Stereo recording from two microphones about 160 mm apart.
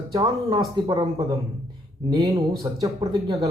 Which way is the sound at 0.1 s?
20° right (ahead or behind).